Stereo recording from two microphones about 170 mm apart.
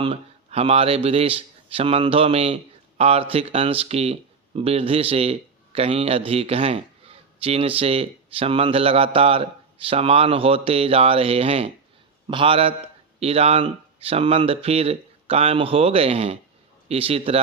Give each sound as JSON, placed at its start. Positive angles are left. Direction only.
{"t": 0.0, "sound": "speech", "side_deg": -35}